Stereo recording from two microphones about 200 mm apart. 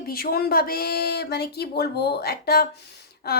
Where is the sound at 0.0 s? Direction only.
50° left (ahead or behind).